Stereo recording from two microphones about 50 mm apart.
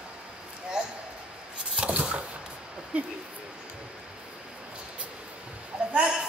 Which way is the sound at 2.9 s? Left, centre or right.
Right.